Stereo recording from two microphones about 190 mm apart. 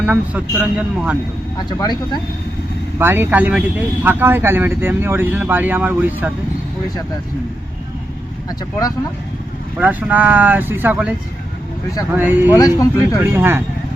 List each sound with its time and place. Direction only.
0.0 s speech: 5° right (ahead or behind)
1.5 s speech: 20° left (ahead or behind)
3.0 s speech: 10° right (ahead or behind)
9.7 s speech: 5° right (ahead or behind)
12.1 s speech: 10° right (ahead or behind)
12.5 s speech: 20° left (ahead or behind)
13.2 s speech: 10° right (ahead or behind)